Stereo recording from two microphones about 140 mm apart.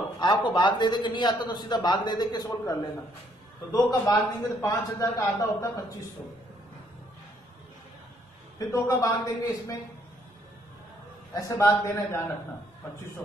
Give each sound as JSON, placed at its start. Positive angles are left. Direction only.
{"t": 0.2, "sound": "a man's voice", "side_deg": 35}
{"t": 8.5, "sound": "a man's voice", "side_deg": 20}
{"t": 11.3, "sound": "a man's voice", "side_deg": 25}